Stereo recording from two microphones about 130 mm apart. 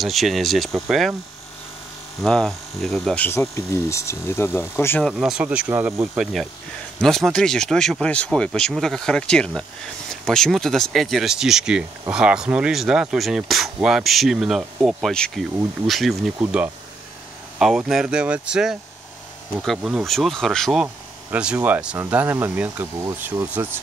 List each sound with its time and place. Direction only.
0.0 s speech: centre (ahead or behind)
2.2 s speech: 5° left (ahead or behind)
3.2 s speech: 20° left (ahead or behind)
5.0 s speech: 5° right (ahead or behind)
7.0 s speech: 5° left (ahead or behind)
16.3 s speech: 15° right (ahead or behind)
17.6 s speech: 5° right (ahead or behind)
20.8 s a sound: 10° right (ahead or behind)
21.6 s speech: 15° right (ahead or behind)